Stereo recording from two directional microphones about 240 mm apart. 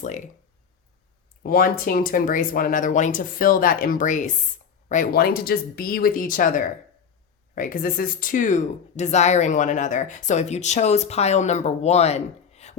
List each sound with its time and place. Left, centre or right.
1.5 s speech: left